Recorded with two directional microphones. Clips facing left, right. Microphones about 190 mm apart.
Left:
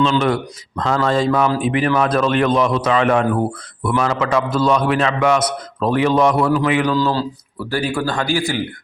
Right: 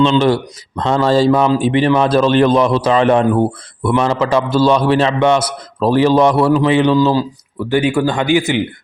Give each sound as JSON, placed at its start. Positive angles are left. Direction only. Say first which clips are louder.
{"t": 0.0, "sound": "a man's voice", "louder": "right 4 dB", "side_deg": -30}